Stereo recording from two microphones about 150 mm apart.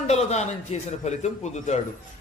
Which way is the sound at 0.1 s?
45° left (ahead or behind).